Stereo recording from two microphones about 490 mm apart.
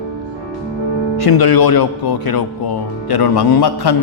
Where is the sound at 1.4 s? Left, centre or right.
Left.